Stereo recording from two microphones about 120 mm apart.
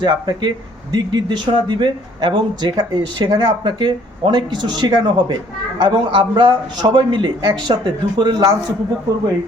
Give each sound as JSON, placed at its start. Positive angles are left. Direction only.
{"t": 0.0, "sound": "speech", "side_deg": -35}